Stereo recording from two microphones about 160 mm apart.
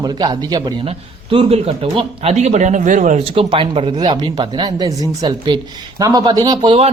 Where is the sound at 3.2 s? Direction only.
35° right (ahead or behind).